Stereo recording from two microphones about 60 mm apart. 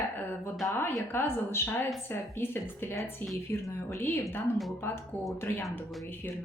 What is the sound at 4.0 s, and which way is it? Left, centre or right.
Speech, left.